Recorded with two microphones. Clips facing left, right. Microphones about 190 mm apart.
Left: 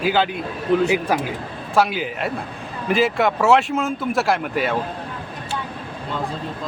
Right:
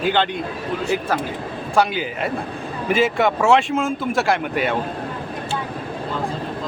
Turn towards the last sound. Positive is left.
turn(degrees=0)  # may be behind; listen again after turning